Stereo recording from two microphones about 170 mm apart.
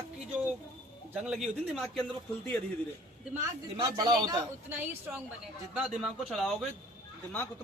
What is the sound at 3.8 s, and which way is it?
Speech, 25° right (ahead or behind).